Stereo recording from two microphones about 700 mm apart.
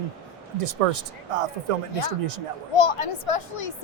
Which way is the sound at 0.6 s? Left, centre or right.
Right.